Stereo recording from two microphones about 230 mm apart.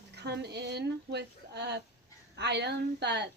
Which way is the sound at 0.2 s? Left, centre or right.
Right.